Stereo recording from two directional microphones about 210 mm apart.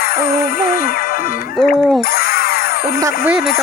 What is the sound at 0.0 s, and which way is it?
Music, 45° left (ahead or behind).